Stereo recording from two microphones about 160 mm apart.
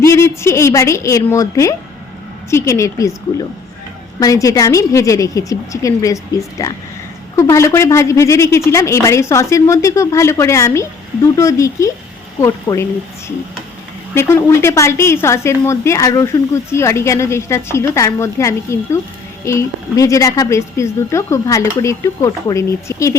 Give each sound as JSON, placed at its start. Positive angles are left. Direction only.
{"t": 0.0, "sound": "a woman's voice", "side_deg": 15}
{"t": 4.2, "sound": "a woman's voice", "side_deg": 20}